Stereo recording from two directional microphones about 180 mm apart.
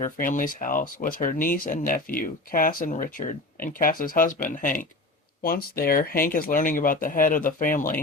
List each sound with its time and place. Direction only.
0.0 s speech: 45° left (ahead or behind)